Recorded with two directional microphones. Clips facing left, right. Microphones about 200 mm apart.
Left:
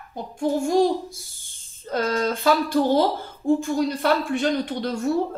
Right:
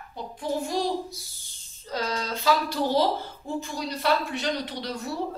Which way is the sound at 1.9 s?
55° left (ahead or behind).